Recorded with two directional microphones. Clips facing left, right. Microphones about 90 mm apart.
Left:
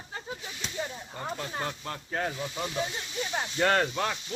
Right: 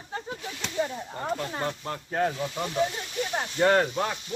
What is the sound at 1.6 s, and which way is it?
Speech, 35° right (ahead or behind).